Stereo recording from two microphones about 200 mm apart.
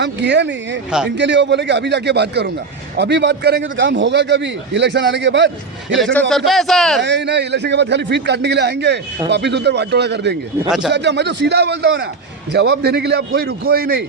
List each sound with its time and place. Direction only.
0.0 s a man's voice: 60° right (ahead or behind)
0.9 s a man's voice: 5° right (ahead or behind)
1.1 s a man's voice: 60° right (ahead or behind)
6.1 s a man's voice: centre (ahead or behind)
7.0 s a man's voice: 60° right (ahead or behind)